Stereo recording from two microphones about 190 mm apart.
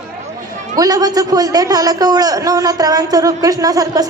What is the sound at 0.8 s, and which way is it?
A man's voice, 20° right (ahead or behind).